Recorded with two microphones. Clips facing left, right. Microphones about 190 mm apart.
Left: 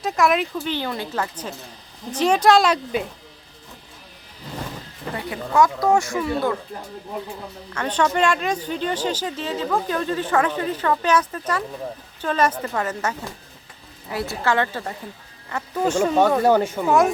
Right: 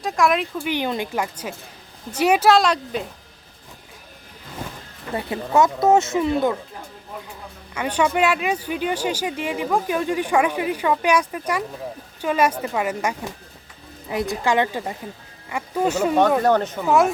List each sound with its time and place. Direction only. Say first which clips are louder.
0.0 s speech: even; centre (ahead or behind)
0.6 s speech: right 2 dB; 15° right (ahead or behind); by 3.0 s centre (ahead or behind)
5.1 s speech: right 1 dB; 25° right (ahead or behind)
7.7 s speech: right 1 dB; 10° right (ahead or behind)
16.4 s speech: left 1 dB; 10° left (ahead or behind)
16.8 s speech: right 1 dB; centre (ahead or behind)